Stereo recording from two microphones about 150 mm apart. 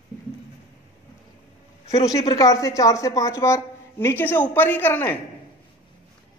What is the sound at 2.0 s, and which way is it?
A woman's voice, 25° left (ahead or behind).